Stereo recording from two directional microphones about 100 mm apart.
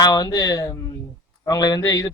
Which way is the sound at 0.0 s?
40° left (ahead or behind).